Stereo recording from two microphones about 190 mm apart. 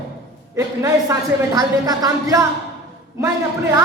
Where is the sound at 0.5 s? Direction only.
15° right (ahead or behind).